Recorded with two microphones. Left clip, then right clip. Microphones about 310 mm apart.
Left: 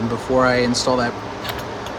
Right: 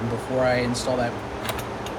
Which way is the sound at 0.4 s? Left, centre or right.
Centre.